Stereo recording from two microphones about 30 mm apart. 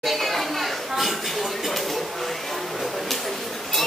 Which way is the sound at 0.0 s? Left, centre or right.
Centre.